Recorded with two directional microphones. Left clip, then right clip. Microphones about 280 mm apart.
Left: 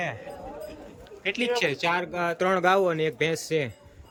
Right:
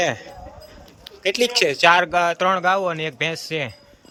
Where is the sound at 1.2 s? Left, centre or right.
Centre.